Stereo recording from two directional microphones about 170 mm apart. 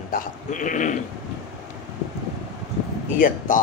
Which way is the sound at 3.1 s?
55° left (ahead or behind).